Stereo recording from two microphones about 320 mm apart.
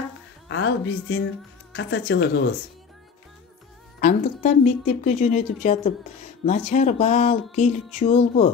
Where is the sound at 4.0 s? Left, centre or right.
Left.